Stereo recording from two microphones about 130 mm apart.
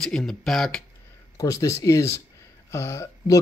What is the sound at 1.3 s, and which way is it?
Speech, 25° left (ahead or behind).